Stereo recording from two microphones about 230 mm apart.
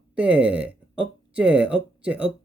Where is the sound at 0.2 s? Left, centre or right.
Centre.